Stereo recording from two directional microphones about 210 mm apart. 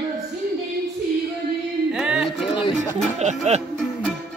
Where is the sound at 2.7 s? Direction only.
35° right (ahead or behind).